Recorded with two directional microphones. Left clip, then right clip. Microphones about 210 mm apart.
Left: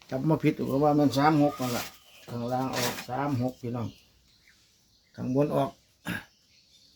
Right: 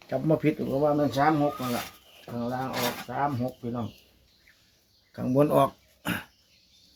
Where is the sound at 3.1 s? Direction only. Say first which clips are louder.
Right 4 dB; 20° left (ahead or behind).